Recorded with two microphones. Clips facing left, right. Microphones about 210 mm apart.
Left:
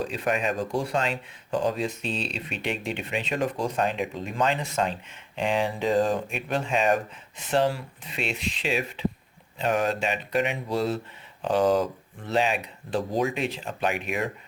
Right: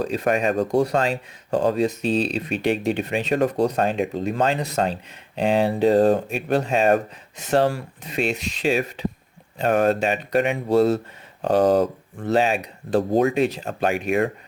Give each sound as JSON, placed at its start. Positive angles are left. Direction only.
{"t": 0.0, "sound": "speech", "side_deg": -40}
{"t": 13.0, "sound": "speech", "side_deg": -60}